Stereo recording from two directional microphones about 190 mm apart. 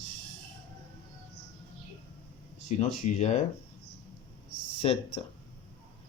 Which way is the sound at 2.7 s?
40° left (ahead or behind).